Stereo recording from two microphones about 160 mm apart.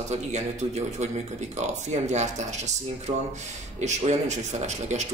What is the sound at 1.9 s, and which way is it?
Speech, 45° right (ahead or behind).